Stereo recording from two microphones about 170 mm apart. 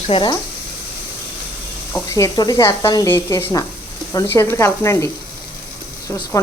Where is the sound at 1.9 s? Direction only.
20° left (ahead or behind).